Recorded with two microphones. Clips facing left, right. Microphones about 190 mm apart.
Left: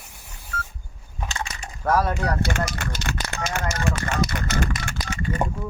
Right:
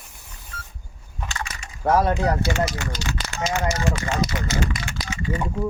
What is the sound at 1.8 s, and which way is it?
Speech, 20° right (ahead or behind).